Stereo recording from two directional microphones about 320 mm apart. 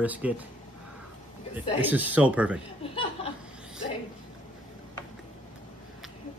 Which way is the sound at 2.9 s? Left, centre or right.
Centre.